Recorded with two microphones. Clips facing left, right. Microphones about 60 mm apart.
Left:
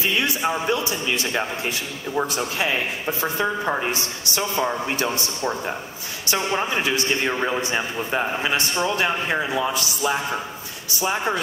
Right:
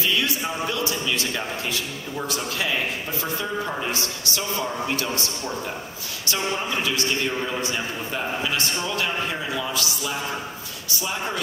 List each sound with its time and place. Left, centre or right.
0.0 s a man's voice: left